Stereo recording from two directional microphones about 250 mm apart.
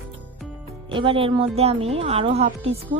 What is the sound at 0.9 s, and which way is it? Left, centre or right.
Speech, right.